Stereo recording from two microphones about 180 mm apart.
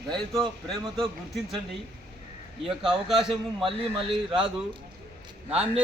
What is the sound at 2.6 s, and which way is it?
Speech, centre (ahead or behind).